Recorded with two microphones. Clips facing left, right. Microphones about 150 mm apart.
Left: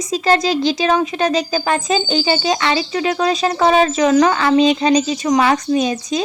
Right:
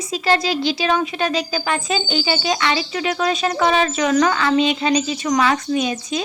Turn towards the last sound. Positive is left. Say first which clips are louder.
# left 4 dB
turn(degrees=35)  # may be behind; listen again after turning